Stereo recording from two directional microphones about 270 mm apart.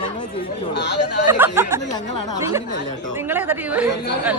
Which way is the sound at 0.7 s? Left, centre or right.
Left.